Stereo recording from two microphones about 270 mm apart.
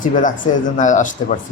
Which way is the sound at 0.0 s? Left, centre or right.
Left.